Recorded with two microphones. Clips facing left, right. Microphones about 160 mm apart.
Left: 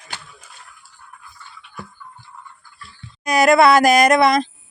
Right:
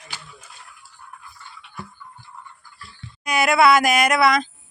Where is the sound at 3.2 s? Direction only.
40° left (ahead or behind).